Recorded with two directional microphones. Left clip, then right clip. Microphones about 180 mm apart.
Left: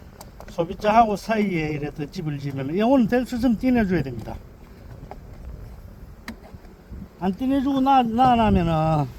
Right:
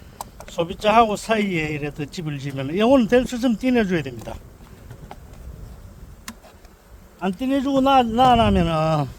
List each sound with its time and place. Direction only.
0.3 s a man's voice: 20° right (ahead or behind)
7.2 s a man's voice: 30° right (ahead or behind)